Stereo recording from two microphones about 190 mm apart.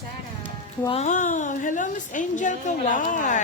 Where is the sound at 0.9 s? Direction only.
35° left (ahead or behind).